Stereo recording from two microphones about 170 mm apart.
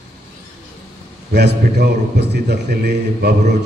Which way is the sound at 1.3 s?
80° right.